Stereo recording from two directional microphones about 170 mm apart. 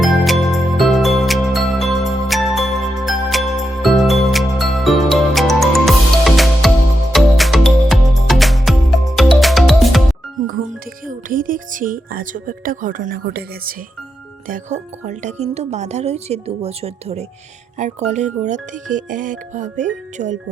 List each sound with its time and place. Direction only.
0.0 s music: centre (ahead or behind)
10.4 s music: 55° right (ahead or behind)
14.4 s speech: 50° right (ahead or behind)